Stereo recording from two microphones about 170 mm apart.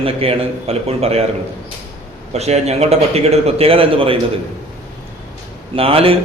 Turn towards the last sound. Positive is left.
turn(degrees=-35)  # may be behind; listen again after turning